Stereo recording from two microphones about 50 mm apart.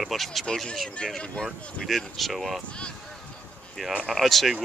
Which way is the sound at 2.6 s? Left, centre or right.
Centre.